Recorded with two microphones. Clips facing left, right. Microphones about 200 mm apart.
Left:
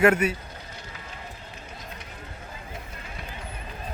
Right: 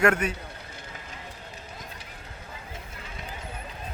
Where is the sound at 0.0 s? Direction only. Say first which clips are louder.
Left 3 dB; 5° left (ahead or behind).